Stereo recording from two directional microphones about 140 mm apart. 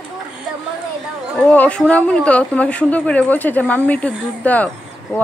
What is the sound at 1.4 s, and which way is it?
A woman's voice, 5° left (ahead or behind).